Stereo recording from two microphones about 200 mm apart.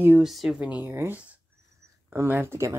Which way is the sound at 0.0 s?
5° right (ahead or behind).